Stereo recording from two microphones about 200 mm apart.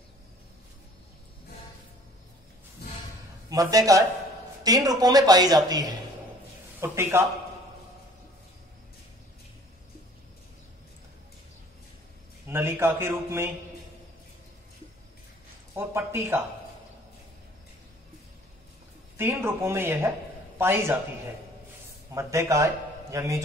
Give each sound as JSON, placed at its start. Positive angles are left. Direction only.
{"t": 3.4, "sound": "a man's voice", "side_deg": -15}
{"t": 12.4, "sound": "a man's voice", "side_deg": -10}
{"t": 15.7, "sound": "a man's voice", "side_deg": -10}
{"t": 19.1, "sound": "a man's voice", "side_deg": -10}
{"t": 22.1, "sound": "a man's voice", "side_deg": -15}